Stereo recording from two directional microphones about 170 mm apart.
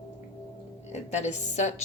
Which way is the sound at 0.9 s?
40° left (ahead or behind).